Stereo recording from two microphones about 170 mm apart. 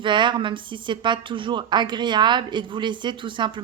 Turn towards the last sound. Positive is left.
turn(degrees=-30)  # may be behind; listen again after turning